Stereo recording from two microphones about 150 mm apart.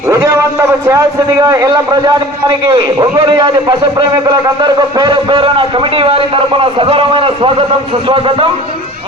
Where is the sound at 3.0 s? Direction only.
25° right (ahead or behind).